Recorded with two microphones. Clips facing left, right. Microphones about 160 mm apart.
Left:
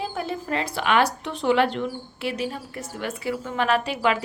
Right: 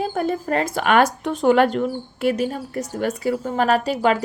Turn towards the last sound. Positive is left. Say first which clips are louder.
# right 4 dB
turn(degrees=-40)  # may be behind; listen again after turning